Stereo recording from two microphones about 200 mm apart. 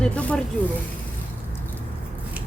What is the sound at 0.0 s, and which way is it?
Speech, 5° left (ahead or behind).